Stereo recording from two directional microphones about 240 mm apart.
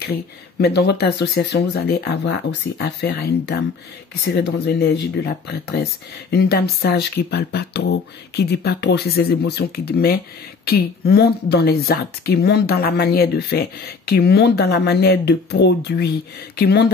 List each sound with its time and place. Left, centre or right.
0.0 s speech: left